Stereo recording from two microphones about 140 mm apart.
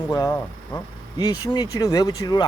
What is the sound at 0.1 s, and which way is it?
Speech, 20° left (ahead or behind).